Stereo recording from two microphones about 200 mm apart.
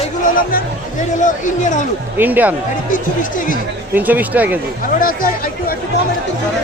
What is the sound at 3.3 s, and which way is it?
Speech, 40° left (ahead or behind).